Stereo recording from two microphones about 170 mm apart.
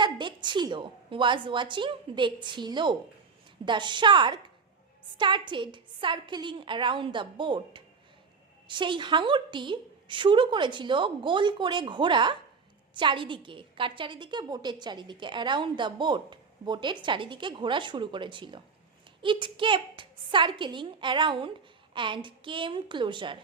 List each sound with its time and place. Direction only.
0.0 s a woman's voice: 25° right (ahead or behind)